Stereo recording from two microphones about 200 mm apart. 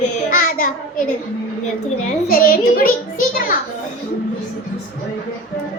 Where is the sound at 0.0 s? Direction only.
45° left (ahead or behind).